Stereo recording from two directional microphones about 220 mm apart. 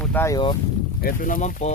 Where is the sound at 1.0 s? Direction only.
40° left (ahead or behind).